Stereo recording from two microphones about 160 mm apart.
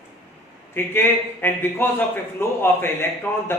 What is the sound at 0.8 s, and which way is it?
A man's voice, 15° left (ahead or behind).